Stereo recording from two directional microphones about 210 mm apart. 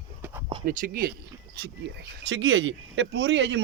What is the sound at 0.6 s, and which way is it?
Speech, 40° right (ahead or behind).